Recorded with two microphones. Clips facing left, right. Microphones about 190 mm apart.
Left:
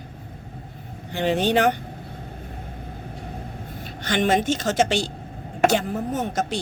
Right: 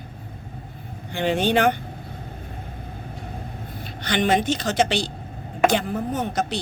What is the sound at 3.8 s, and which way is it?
A woman's voice, 45° left (ahead or behind).